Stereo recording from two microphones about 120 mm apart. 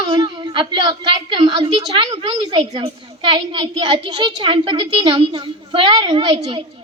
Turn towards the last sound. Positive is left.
turn(degrees=-40)  # may be behind; listen again after turning